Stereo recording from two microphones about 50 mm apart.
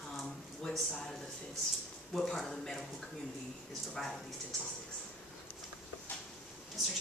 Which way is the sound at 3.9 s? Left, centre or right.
Centre.